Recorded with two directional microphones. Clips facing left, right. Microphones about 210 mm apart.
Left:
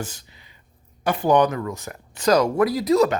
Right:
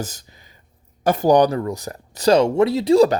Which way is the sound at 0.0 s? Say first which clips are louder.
Right 3 dB; 40° right (ahead or behind).